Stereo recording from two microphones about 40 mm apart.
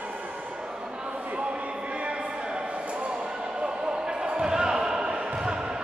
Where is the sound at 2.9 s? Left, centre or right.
Right.